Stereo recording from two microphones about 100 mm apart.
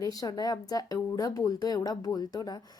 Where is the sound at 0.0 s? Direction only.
40° left (ahead or behind).